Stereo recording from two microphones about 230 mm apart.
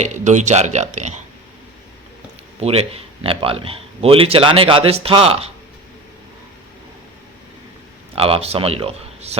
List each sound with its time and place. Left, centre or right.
0.0 s speech: right
2.6 s speech: right
8.1 s speech: right